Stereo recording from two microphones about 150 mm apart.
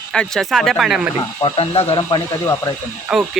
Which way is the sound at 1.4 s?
40° left (ahead or behind).